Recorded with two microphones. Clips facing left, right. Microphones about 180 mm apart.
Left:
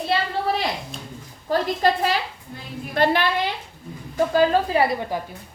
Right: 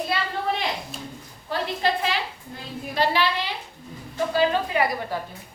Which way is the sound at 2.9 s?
55° left (ahead or behind).